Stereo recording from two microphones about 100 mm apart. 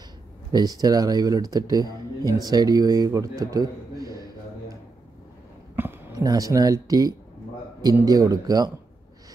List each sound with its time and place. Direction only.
0.5 s speech: 40° right (ahead or behind)
5.8 s a sound: 20° right (ahead or behind)
6.1 s speech: 35° right (ahead or behind)